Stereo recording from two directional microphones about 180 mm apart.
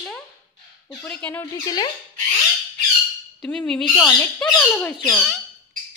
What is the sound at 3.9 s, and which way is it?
Speech, 20° left (ahead or behind).